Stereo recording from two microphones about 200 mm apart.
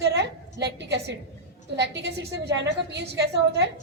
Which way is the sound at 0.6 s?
60° right (ahead or behind).